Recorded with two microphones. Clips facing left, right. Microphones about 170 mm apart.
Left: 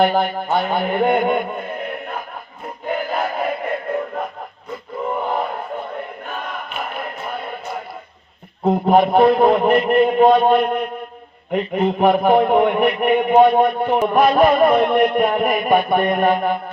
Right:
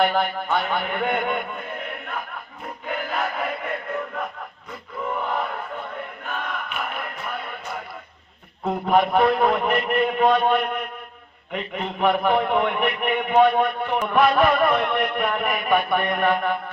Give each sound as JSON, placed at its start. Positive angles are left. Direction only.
{"t": 0.0, "sound": "a man's voice", "side_deg": 35}
{"t": 2.8, "sound": "crowd", "side_deg": 35}
{"t": 5.0, "sound": "male singing", "side_deg": 35}
{"t": 6.7, "sound": "music", "side_deg": 35}
{"t": 8.6, "sound": "a man's voice", "side_deg": 30}